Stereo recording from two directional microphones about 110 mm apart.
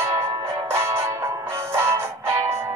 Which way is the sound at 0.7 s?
25° right (ahead or behind).